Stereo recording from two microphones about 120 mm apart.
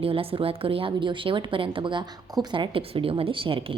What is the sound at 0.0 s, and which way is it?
A woman's voice, 50° right (ahead or behind).